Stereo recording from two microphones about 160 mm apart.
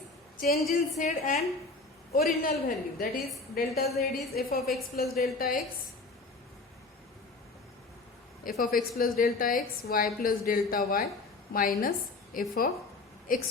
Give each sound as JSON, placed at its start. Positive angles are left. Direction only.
{"t": 0.3, "sound": "a woman's voice", "side_deg": 70}
{"t": 0.7, "sound": "a woman's voice", "side_deg": 55}
{"t": 2.1, "sound": "a woman's voice", "side_deg": 65}
{"t": 8.4, "sound": "a woman's voice", "side_deg": 65}